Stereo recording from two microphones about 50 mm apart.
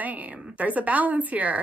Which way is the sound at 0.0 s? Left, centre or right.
Right.